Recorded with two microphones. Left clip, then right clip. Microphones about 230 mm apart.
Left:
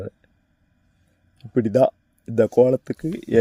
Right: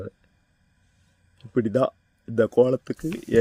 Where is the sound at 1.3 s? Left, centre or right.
Centre.